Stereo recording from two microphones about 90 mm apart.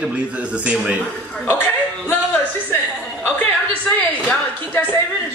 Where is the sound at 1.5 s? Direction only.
25° left (ahead or behind).